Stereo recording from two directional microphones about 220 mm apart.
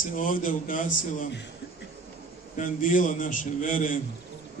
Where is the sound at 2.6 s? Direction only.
35° left (ahead or behind).